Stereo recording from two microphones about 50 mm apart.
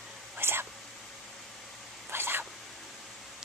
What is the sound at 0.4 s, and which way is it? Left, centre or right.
Whispering, right.